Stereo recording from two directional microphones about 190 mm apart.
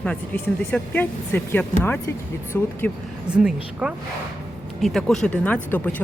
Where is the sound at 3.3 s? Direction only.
5° right (ahead or behind).